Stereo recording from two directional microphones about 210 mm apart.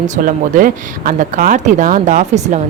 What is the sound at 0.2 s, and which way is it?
Speech, 40° right (ahead or behind).